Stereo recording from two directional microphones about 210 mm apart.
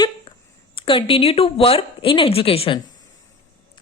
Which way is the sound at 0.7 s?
25° left (ahead or behind).